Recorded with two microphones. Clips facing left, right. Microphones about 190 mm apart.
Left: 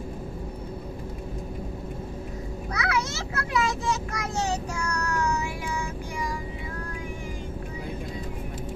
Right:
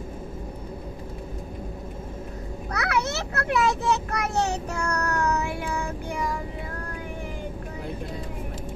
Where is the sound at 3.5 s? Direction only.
65° right (ahead or behind).